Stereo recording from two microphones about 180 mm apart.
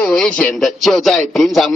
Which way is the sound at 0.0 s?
5° left (ahead or behind).